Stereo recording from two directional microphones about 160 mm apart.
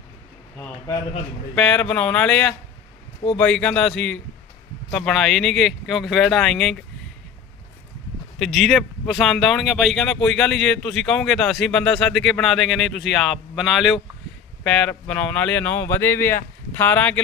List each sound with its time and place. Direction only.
0.5 s speech: 15° left (ahead or behind)
1.5 s speech: 5° left (ahead or behind)
8.4 s speech: centre (ahead or behind)